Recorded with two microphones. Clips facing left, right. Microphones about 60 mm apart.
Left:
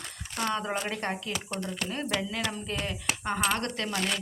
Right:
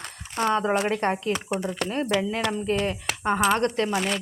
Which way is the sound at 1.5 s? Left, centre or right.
Centre.